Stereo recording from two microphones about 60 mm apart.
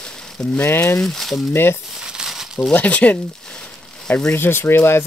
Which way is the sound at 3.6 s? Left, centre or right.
Centre.